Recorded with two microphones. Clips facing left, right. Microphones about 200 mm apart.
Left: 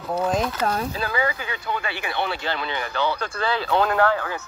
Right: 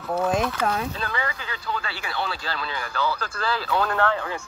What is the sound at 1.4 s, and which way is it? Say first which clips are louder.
Speech: left 3 dB; 20° left (ahead or behind).